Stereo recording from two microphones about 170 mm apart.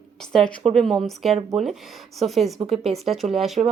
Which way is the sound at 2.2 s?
Centre (ahead or behind).